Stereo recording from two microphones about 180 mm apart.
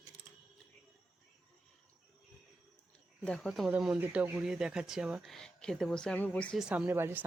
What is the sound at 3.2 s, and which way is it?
Speech, centre (ahead or behind).